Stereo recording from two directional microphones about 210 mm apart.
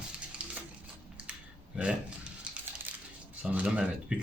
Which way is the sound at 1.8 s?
5° right (ahead or behind).